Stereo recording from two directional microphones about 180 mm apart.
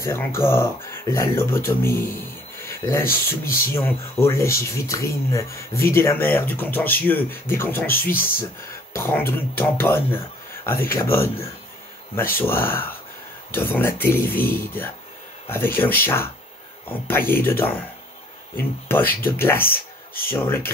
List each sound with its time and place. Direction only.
0.0 s speech: 15° left (ahead or behind)